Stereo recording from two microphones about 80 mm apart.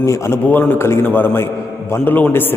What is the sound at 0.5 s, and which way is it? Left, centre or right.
A man's voice, left.